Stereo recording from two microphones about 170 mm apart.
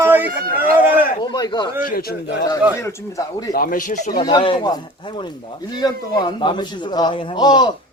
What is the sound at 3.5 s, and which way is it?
Speech, 55° left (ahead or behind).